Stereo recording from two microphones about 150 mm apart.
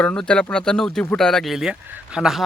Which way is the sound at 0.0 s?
10° left (ahead or behind).